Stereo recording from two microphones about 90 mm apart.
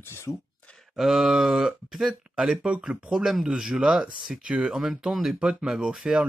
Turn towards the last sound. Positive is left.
turn(degrees=-5)  # may be behind; listen again after turning